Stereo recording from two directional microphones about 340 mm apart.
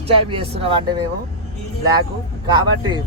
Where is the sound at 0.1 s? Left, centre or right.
Centre.